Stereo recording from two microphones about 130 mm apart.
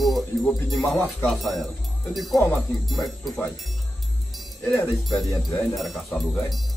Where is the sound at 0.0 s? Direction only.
Centre (ahead or behind).